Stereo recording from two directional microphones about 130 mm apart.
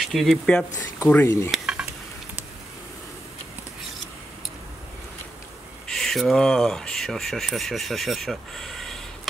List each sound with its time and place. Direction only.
0.0 s speech: centre (ahead or behind)
0.9 s speech: 20° left (ahead or behind)
1.5 s stir: 5° right (ahead or behind)
5.9 s speech: 5° left (ahead or behind)